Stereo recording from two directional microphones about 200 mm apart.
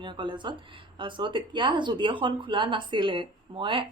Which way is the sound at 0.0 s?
25° right (ahead or behind).